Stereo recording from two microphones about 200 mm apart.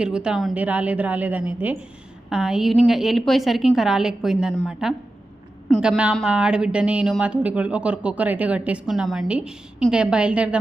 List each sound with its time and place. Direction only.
0.0 s a woman's voice: 5° right (ahead or behind)